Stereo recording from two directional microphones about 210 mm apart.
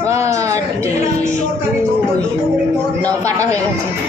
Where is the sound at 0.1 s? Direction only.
15° right (ahead or behind).